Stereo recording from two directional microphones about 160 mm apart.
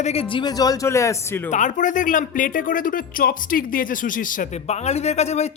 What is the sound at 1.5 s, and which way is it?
Speech, 50° left (ahead or behind).